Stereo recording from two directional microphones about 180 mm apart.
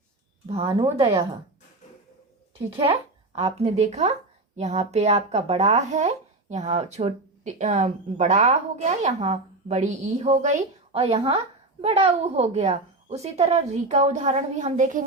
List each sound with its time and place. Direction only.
0.4 s speech: 30° right (ahead or behind)
2.8 s speech: 35° right (ahead or behind)